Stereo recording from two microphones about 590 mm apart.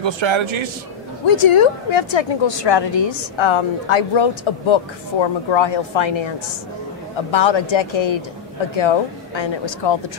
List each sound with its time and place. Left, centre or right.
0.0 s a man's voice: right
1.2 s a woman's voice: left